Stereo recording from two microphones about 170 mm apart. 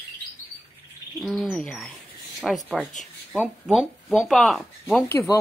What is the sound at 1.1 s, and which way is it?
Speech, centre (ahead or behind).